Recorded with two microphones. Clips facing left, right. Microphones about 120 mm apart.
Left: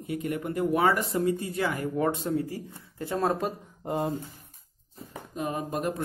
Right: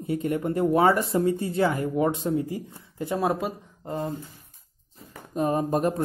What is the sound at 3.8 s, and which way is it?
Speech, 10° left (ahead or behind).